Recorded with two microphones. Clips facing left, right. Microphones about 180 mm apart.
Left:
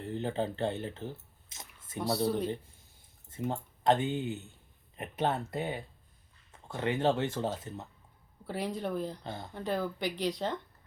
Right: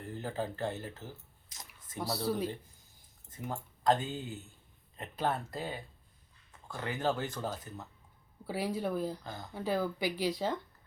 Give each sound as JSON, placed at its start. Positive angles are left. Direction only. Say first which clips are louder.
{"t": 0.0, "sound": "speech", "louder": "left 4 dB", "side_deg": 25}
{"t": 2.2, "sound": "speech", "louder": "left 1 dB", "side_deg": -5}
{"t": 3.2, "sound": "speech", "louder": "left 5 dB", "side_deg": 25}
{"t": 8.4, "sound": "speech", "louder": "right 1 dB", "side_deg": -5}
{"t": 9.2, "sound": "speech", "louder": "left 3 dB", "side_deg": 25}
{"t": 9.6, "sound": "speech", "louder": "right 1 dB", "side_deg": -5}